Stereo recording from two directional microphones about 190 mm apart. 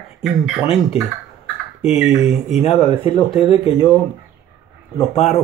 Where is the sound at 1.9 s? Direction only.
5° right (ahead or behind).